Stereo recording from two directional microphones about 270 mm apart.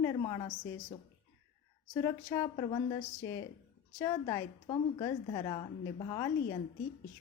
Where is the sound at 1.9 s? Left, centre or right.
Centre.